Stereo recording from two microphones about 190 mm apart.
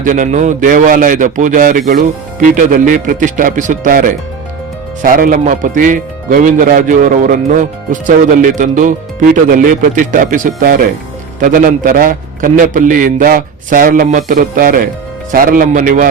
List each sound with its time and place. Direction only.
0.0 s a man's voice: 45° right (ahead or behind)